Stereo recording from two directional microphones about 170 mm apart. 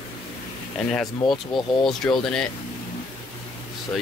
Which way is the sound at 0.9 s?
Centre (ahead or behind).